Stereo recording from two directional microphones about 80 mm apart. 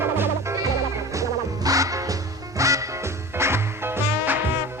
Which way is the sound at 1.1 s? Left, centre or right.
Right.